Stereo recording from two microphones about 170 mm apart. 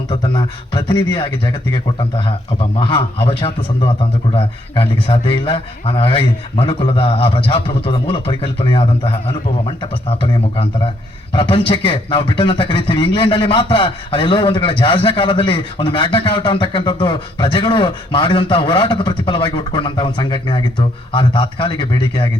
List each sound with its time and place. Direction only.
0.1 s a man's voice: 25° left (ahead or behind)